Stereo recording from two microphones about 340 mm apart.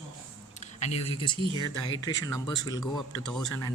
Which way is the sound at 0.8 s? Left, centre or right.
Centre.